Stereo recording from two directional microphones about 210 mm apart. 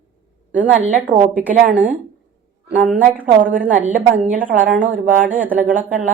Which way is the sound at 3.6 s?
40° right (ahead or behind).